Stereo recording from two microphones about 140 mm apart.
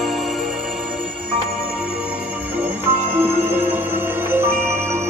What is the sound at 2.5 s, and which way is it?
Music, 15° right (ahead or behind).